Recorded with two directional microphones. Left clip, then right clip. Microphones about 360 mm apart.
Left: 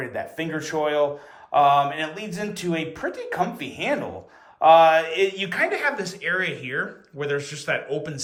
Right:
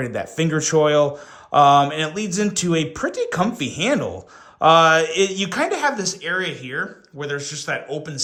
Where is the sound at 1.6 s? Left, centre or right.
Centre.